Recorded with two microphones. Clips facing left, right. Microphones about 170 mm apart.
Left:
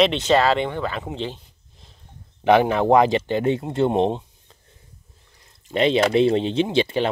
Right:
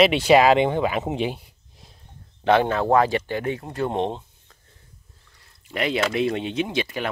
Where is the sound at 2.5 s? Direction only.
15° left (ahead or behind).